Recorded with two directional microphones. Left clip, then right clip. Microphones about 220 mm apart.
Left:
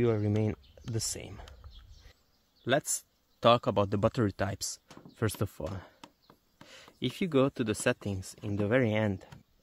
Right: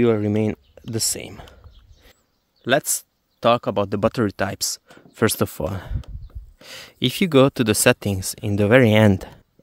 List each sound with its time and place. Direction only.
0.0 s speech: 50° right (ahead or behind)
2.6 s speech: 45° right (ahead or behind)
3.3 s speech: 30° right (ahead or behind); by 9.3 s 55° right (ahead or behind)